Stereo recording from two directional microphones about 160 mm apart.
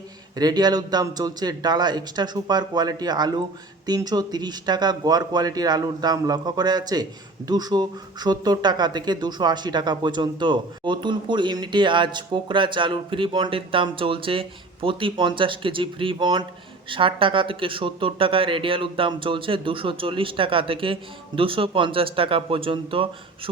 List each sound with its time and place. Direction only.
0.3 s speech: 25° right (ahead or behind)